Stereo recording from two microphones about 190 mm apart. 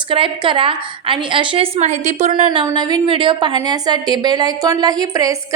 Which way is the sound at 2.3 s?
25° right (ahead or behind).